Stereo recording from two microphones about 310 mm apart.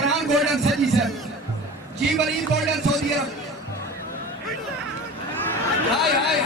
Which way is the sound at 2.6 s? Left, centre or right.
Centre.